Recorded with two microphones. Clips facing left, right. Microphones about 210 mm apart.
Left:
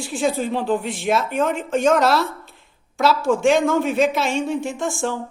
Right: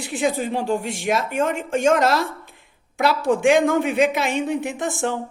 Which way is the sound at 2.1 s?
15° right (ahead or behind).